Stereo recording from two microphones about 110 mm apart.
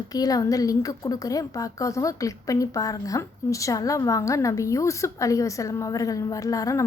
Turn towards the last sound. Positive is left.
turn(degrees=30)  # may be behind; listen again after turning